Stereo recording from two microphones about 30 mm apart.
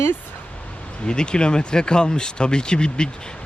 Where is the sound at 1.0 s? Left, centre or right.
Left.